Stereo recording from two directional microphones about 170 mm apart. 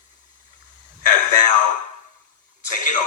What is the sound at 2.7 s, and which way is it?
Speech, 50° left (ahead or behind).